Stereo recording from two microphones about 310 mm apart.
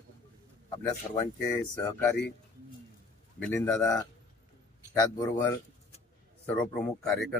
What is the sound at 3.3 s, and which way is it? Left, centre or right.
A man's voice, centre.